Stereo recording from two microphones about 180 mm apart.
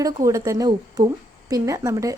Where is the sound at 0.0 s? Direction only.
20° right (ahead or behind).